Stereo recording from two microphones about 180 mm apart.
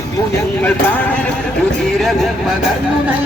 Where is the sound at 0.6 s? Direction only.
10° left (ahead or behind).